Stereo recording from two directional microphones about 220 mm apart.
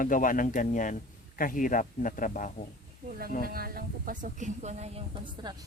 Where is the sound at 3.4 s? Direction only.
40° right (ahead or behind).